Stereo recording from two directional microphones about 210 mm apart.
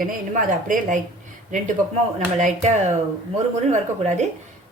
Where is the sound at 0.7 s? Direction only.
40° right (ahead or behind).